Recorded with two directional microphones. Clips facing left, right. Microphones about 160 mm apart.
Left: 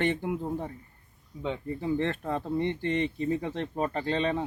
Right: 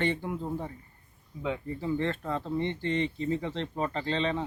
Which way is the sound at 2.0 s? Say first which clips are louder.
Left 1 dB; 55° left (ahead or behind).